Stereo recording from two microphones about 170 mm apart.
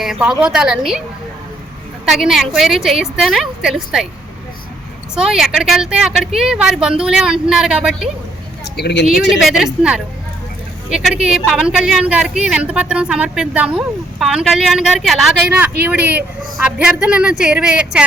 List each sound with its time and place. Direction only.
0.0 s a woman's voice: 5° right (ahead or behind)
2.0 s a woman's voice: centre (ahead or behind)
5.1 s a woman's voice: 5° right (ahead or behind)
8.7 s speech: 75° left (ahead or behind)
9.4 s a woman's voice: centre (ahead or behind)
10.9 s a woman's voice: 5° right (ahead or behind)